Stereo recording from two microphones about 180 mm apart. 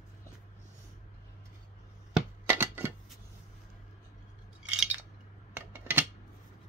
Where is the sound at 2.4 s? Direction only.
15° right (ahead or behind).